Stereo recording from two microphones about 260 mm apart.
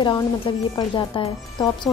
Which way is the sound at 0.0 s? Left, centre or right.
Centre.